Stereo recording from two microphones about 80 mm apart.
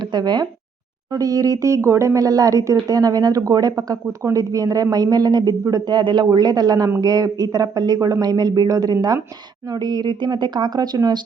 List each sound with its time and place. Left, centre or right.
0.1 s speech: right
1.1 s speech: right
5.9 s speech: right